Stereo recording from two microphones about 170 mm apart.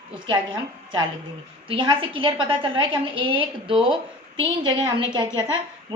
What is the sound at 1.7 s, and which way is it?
A woman's voice, 30° right (ahead or behind).